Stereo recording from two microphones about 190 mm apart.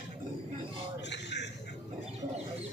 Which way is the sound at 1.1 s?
65° left (ahead or behind).